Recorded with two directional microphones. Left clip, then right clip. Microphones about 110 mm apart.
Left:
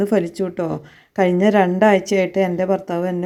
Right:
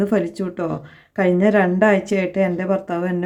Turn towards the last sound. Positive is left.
turn(degrees=30)  # may be behind; listen again after turning